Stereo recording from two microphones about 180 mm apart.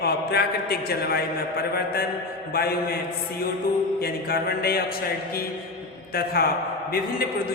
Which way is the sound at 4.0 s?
60° left (ahead or behind).